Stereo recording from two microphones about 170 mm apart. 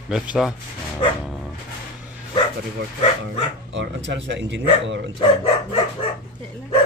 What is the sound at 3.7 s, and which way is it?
Speech, 90° right.